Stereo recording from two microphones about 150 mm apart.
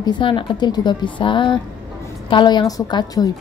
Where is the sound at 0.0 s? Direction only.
35° left (ahead or behind).